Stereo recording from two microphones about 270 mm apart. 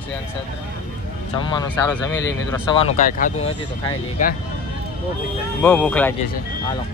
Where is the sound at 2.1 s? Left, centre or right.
Centre.